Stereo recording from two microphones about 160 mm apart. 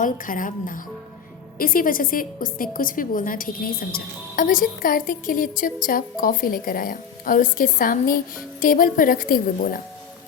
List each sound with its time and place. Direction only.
0.0 s a woman's voice: 55° left (ahead or behind)